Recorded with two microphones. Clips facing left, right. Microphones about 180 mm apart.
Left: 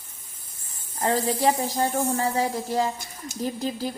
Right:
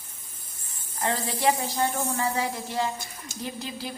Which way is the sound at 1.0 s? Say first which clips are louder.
Left 3 dB; 40° left (ahead or behind).